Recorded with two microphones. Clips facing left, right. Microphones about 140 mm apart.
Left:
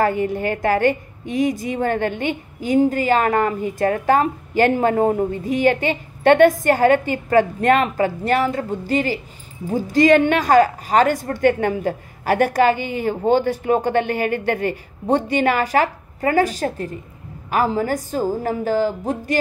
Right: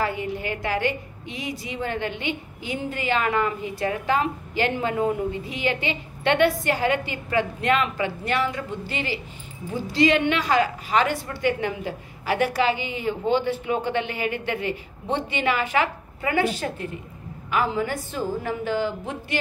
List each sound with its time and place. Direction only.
0.0 s a woman's voice: 50° left (ahead or behind)